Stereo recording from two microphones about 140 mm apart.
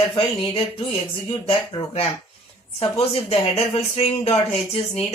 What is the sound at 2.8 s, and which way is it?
Speech, 45° left (ahead or behind).